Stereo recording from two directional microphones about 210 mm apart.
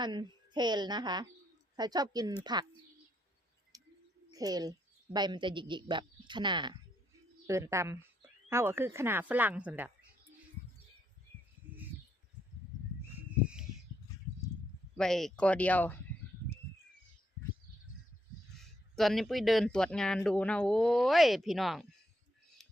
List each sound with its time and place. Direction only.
0.0 s speech: 20° right (ahead or behind)
3.7 s bird: 15° right (ahead or behind)
4.3 s speech: 15° right (ahead or behind)
13.1 s a sound: 5° right (ahead or behind)
14.9 s speech: centre (ahead or behind)
18.6 s speech: centre (ahead or behind)